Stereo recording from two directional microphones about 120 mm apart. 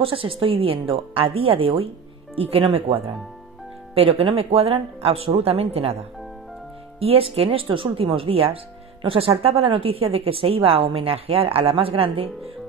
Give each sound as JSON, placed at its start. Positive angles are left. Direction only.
{"t": 0.0, "sound": "a woman's voice", "side_deg": -50}
{"t": 7.0, "sound": "a woman's voice", "side_deg": -50}